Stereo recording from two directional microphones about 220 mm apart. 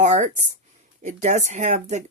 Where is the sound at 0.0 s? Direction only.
35° right (ahead or behind).